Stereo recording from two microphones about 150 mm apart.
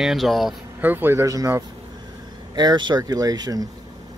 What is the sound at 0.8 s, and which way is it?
Speech, 15° right (ahead or behind).